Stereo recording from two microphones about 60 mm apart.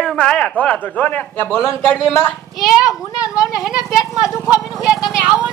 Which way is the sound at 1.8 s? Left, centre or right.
Centre.